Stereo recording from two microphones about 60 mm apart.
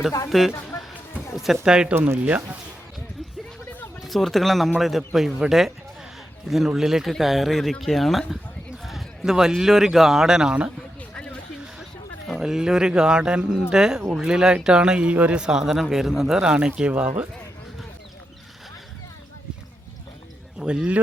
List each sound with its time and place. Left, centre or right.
0.3 s speech: centre
1.6 s speech: centre
2.1 s speech: right
4.0 s speech: centre
11.1 s a sound: centre
12.4 s speech: centre
20.6 s speech: centre